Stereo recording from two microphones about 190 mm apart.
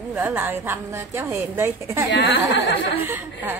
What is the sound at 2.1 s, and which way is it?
Speech, 65° left (ahead or behind).